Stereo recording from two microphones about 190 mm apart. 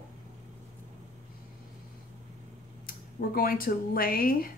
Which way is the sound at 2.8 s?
50° left (ahead or behind).